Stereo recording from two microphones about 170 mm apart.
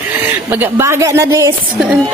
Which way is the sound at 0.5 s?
15° right (ahead or behind).